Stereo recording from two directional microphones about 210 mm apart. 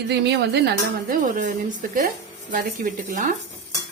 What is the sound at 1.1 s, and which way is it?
Speech, 40° right (ahead or behind).